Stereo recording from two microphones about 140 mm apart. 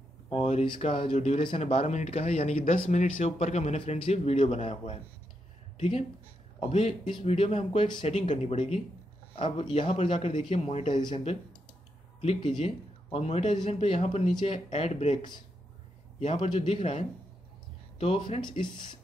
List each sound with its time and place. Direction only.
0.3 s a man's voice: 50° left (ahead or behind)
1.1 s a man's voice: 50° left (ahead or behind); by 8.4 s 35° left (ahead or behind)
8.5 s a man's voice: 45° left (ahead or behind)
10.9 s speech: 35° left (ahead or behind)
12.6 s a man's voice: 45° left (ahead or behind)
16.2 s a man's voice: 45° left (ahead or behind)